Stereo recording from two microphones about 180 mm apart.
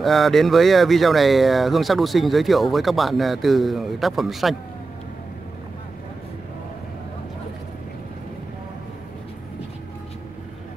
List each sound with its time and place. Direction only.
0.0 s speech: centre (ahead or behind)